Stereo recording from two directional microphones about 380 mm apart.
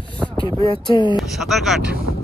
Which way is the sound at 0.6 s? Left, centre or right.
Centre.